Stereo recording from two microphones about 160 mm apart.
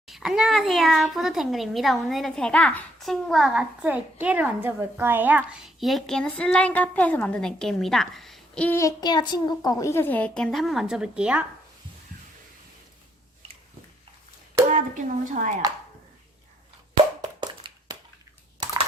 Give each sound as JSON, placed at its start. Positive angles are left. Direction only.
{"t": 0.1, "sound": "a child's voice", "side_deg": -5}
{"t": 14.7, "sound": "speech", "side_deg": -55}
{"t": 17.2, "sound": "hands", "side_deg": -25}
{"t": 18.6, "sound": "a sound", "side_deg": -25}